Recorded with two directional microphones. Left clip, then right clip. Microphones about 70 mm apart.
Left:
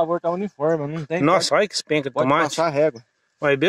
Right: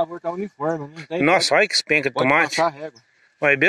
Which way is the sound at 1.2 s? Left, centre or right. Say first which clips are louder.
Right 2 dB; centre.